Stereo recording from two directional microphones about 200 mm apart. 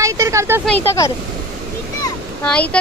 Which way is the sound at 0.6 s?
5° left (ahead or behind).